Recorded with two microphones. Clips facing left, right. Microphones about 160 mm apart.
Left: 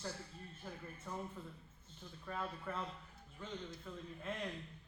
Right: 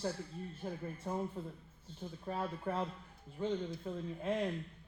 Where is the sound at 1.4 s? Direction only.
35° right (ahead or behind).